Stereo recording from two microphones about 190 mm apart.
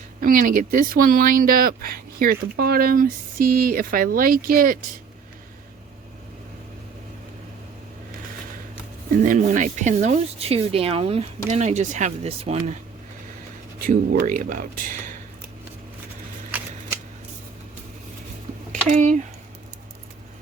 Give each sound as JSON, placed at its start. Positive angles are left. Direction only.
{"t": 0.2, "sound": "speech", "side_deg": -45}
{"t": 9.2, "sound": "speech", "side_deg": -45}
{"t": 13.7, "sound": "speech", "side_deg": -50}
{"t": 18.7, "sound": "speech", "side_deg": -40}